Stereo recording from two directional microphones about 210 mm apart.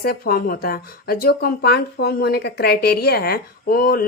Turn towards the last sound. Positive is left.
turn(degrees=45)  # may be behind; listen again after turning